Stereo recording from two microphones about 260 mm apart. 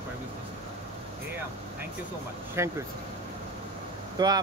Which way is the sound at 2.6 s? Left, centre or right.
Centre.